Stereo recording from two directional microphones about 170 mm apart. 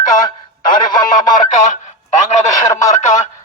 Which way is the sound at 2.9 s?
45° left (ahead or behind).